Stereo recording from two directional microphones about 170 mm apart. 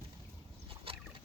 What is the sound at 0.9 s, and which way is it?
Boat, 35° right (ahead or behind).